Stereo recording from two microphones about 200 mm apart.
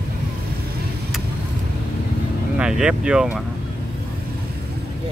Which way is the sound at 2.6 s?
5° right (ahead or behind).